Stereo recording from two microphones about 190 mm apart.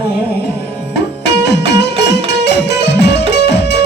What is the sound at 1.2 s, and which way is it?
Music, 65° left (ahead or behind).